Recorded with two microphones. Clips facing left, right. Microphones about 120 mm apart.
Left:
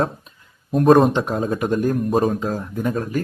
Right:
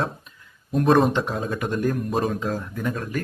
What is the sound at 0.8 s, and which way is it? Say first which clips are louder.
Speech: left 5 dB; 45° left (ahead or behind).